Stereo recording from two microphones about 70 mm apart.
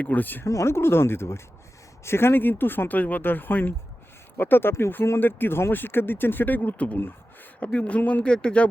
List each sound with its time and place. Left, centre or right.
0.0 s speech: left
0.4 s speech: left; by 8.6 s centre